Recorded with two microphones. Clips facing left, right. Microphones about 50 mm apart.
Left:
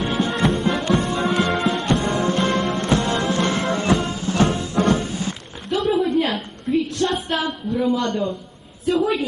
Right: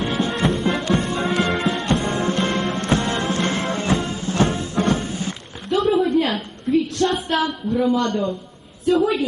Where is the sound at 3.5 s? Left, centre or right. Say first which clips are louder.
Left 2 dB; left.